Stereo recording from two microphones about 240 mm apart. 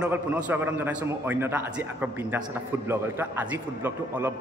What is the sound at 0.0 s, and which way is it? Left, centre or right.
A man's voice, centre.